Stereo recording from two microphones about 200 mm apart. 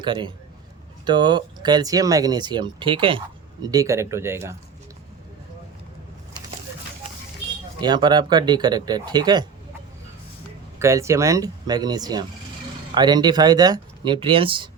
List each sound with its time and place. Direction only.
0.0 s a man's voice: 25° right (ahead or behind)
7.8 s speech: 20° right (ahead or behind)
10.8 s speech: 15° right (ahead or behind)